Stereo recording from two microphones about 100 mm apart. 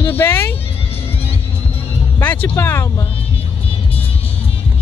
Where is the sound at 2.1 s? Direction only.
25° left (ahead or behind).